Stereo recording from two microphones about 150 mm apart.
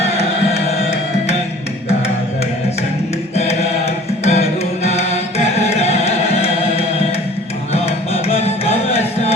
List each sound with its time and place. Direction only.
0.0 s music: 45° left (ahead or behind)
4.2 s music: 45° left (ahead or behind)